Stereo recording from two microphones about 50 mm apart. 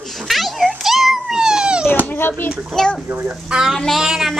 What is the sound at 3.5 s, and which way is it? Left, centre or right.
Speech, centre.